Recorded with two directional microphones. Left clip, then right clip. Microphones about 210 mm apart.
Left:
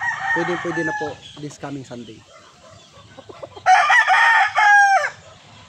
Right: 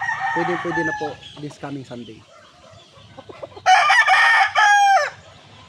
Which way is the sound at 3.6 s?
45° right (ahead or behind).